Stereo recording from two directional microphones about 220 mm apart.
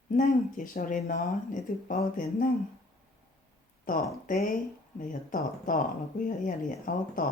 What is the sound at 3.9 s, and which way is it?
Speech, 35° left (ahead or behind).